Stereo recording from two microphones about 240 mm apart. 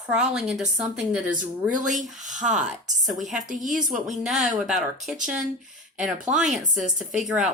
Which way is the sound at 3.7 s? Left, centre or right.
Right.